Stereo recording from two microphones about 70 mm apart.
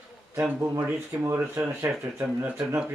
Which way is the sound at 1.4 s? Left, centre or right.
Right.